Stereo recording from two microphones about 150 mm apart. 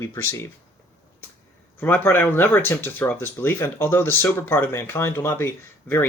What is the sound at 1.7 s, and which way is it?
Speech, 15° left (ahead or behind).